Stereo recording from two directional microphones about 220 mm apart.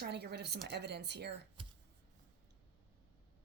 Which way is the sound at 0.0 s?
50° right (ahead or behind).